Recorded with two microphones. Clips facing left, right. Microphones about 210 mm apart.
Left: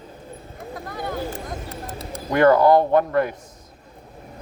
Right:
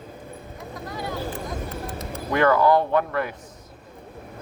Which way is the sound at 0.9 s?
50° left (ahead or behind).